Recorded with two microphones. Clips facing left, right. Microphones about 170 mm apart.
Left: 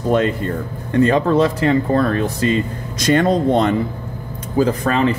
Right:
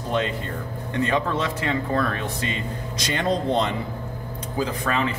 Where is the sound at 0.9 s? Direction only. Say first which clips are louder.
Left 10 dB; 40° left (ahead or behind).